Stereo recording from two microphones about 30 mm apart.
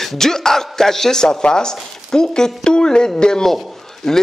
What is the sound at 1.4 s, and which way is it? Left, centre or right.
A man's voice, left.